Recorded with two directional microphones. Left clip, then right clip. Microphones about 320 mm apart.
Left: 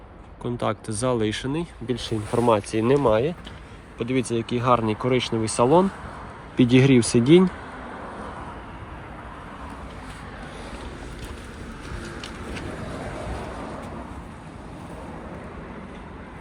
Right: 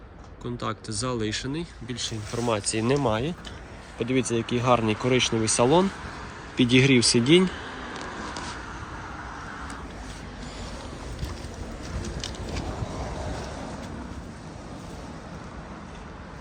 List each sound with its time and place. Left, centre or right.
0.6 s speech: centre